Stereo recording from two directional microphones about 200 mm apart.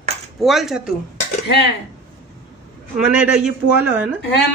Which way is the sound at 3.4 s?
10° right (ahead or behind).